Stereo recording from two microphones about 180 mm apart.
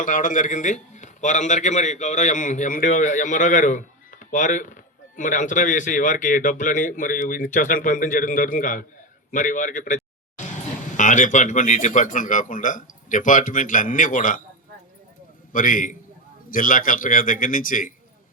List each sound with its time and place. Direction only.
0.0 s a man's voice: 45° left (ahead or behind)
15.5 s a man's voice: 50° left (ahead or behind)